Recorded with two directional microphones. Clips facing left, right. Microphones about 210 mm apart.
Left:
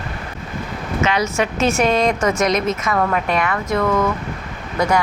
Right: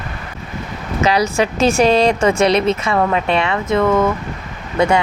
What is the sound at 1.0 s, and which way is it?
A woman's voice, 35° right (ahead or behind).